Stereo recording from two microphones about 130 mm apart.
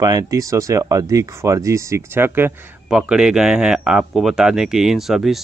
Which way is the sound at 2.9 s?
5° right (ahead or behind).